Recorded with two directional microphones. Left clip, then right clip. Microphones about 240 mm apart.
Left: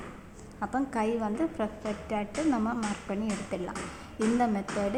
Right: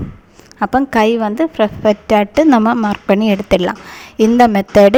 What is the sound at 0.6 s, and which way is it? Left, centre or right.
A woman's voice, right.